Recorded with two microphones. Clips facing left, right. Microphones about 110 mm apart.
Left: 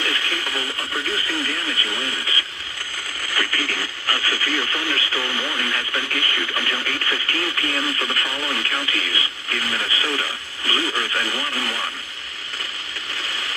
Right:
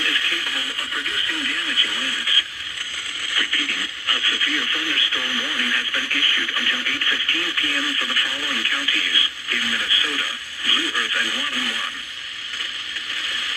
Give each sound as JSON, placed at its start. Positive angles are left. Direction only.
{"t": 0.0, "sound": "radio", "side_deg": 30}
{"t": 3.3, "sound": "radio", "side_deg": 45}
{"t": 13.1, "sound": "mechanisms", "side_deg": 30}